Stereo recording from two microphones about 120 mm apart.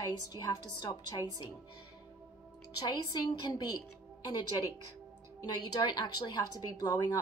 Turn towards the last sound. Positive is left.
turn(degrees=30)  # may be behind; listen again after turning